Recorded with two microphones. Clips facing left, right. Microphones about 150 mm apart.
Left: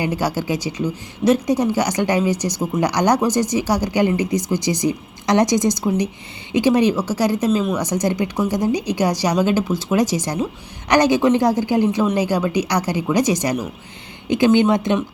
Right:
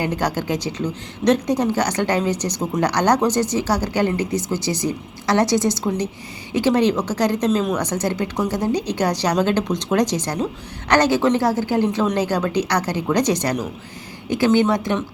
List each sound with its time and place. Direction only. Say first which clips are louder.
0.0 s a woman's voice: left 1 dB; 10° left (ahead or behind)